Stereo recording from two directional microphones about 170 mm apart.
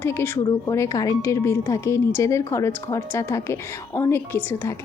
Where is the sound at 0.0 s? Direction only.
15° left (ahead or behind).